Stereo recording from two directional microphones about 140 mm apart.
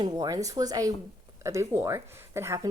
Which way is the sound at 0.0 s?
25° right (ahead or behind).